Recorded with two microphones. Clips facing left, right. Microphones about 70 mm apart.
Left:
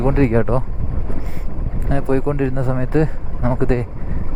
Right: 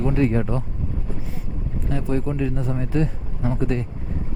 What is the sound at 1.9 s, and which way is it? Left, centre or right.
A man's voice, left.